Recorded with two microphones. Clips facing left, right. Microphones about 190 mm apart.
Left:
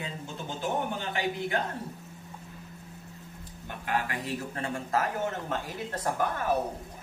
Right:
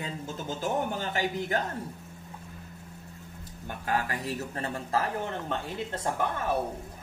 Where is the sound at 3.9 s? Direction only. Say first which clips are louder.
Right 1 dB; 40° right (ahead or behind).